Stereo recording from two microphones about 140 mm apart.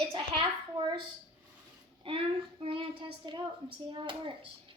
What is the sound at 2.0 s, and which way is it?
Child singing, 40° right (ahead or behind).